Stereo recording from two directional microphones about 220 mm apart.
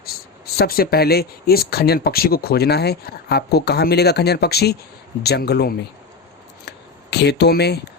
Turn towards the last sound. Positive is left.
turn(degrees=50)  # may be behind; listen again after turning